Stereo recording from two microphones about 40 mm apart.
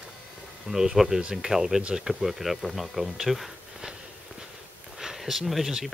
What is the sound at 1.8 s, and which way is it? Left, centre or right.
Speech, right.